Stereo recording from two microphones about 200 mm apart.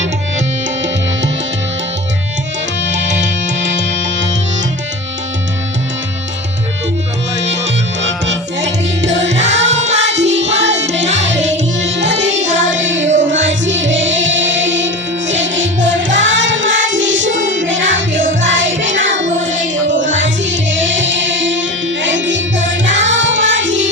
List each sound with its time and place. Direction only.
2.8 s music: 65° right (ahead or behind)
9.0 s music: 65° right (ahead or behind)
9.2 s music: 35° right (ahead or behind)
10.0 s music: 65° right (ahead or behind)